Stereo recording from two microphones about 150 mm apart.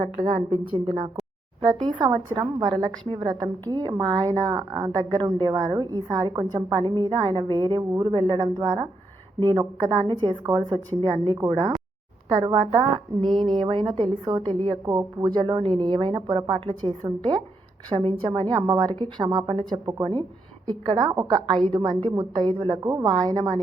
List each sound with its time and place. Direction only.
0.0 s a woman's voice: 45° right (ahead or behind); by 12.5 s 25° right (ahead or behind)
12.5 s a woman's voice: 40° right (ahead or behind)
13.2 s speech: centre (ahead or behind)
13.6 s a woman's voice: 30° right (ahead or behind)
17.9 s a woman's voice: 35° right (ahead or behind)